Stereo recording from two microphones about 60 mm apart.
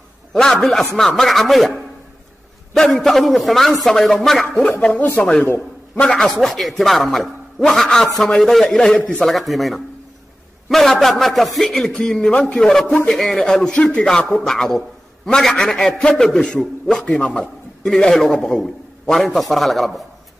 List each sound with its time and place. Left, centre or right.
0.3 s speech: centre
4.8 s a man's voice: left
13.1 s speech: centre
13.4 s a man's voice: centre